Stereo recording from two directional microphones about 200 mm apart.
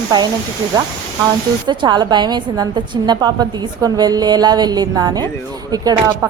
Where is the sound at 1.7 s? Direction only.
25° right (ahead or behind).